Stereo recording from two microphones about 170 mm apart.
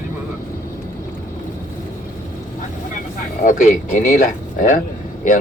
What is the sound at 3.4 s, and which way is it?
Speech, 50° left (ahead or behind).